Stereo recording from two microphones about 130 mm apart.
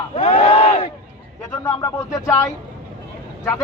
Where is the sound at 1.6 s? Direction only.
25° left (ahead or behind).